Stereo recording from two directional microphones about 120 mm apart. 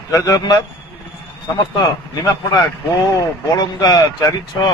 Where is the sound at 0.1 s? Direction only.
30° left (ahead or behind).